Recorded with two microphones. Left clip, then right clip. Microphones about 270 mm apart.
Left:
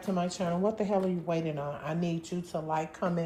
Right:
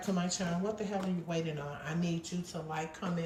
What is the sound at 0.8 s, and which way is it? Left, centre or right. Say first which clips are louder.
Speech: left 8 dB; centre.